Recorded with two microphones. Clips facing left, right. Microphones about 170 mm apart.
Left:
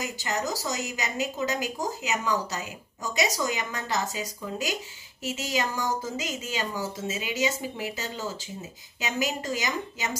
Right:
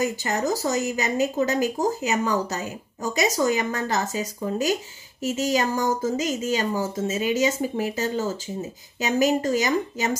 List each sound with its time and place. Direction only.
0.0 s speech: 50° right (ahead or behind)